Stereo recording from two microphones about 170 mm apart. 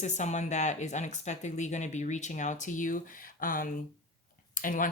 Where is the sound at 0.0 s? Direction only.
45° left (ahead or behind).